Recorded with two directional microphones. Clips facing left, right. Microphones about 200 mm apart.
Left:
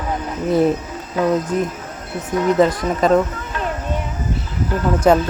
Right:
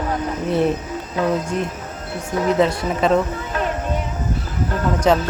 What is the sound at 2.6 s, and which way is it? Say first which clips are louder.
Speech: left 2 dB; 40° left (ahead or behind).